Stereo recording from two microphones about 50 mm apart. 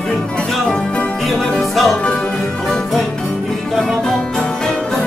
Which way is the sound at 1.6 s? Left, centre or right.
Centre.